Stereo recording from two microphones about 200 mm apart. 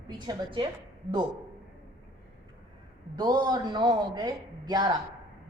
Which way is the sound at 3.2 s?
20° right (ahead or behind).